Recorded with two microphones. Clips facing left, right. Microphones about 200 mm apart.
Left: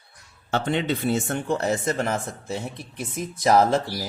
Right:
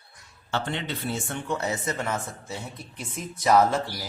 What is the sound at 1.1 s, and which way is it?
Speech, 60° left (ahead or behind).